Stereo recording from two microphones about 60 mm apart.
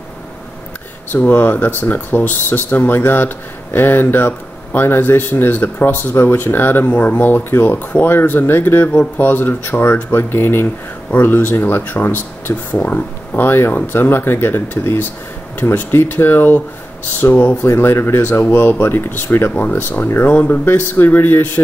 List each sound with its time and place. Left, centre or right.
1.1 s speech: left
6.9 s speech: left
16.1 s speech: left
17.6 s speech: left